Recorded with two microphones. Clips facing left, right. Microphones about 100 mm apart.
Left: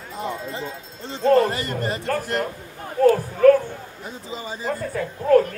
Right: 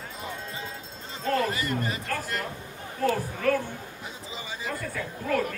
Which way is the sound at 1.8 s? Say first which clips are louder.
Left 6 dB; 60° left (ahead or behind).